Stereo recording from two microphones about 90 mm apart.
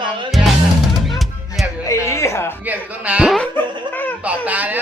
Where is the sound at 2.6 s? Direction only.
15° right (ahead or behind).